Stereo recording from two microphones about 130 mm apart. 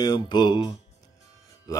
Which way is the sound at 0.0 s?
35° left (ahead or behind).